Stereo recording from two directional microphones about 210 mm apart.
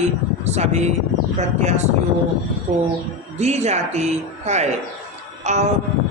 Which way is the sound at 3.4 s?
30° right (ahead or behind).